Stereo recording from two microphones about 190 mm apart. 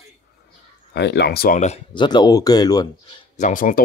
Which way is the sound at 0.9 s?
60° left (ahead or behind).